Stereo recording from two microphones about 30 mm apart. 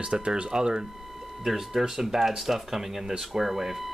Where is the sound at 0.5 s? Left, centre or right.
Right.